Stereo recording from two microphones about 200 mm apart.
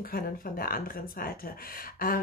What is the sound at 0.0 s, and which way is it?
A woman's voice, 45° left (ahead or behind).